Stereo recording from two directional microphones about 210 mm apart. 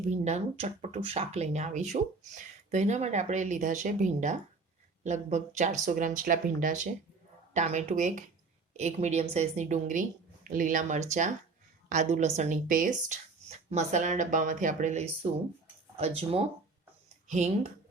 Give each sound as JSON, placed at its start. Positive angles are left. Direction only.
{"t": 0.0, "sound": "speech", "side_deg": -35}